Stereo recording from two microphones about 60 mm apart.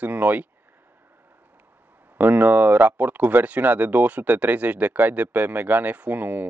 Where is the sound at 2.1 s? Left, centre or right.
Right.